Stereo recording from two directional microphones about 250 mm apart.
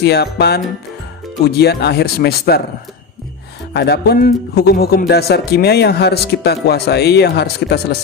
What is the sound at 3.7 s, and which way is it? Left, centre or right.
A man's voice, left.